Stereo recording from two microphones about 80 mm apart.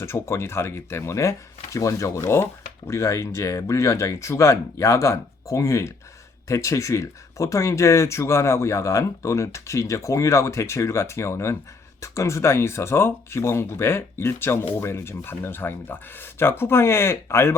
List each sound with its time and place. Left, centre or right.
0.0 s speech: left